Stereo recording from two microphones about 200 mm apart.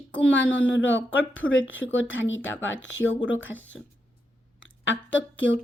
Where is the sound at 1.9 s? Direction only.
75° left (ahead or behind).